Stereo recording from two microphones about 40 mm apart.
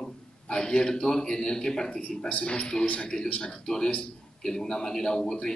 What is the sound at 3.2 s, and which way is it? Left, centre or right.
Speech, left.